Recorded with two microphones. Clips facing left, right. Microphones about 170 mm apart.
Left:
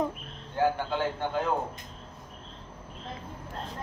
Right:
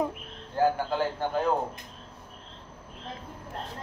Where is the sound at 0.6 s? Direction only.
35° right (ahead or behind).